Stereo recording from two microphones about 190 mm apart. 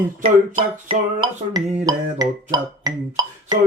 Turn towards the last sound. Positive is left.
turn(degrees=-20)  # may be behind; listen again after turning